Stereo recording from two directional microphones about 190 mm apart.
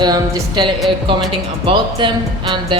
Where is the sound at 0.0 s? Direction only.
25° right (ahead or behind).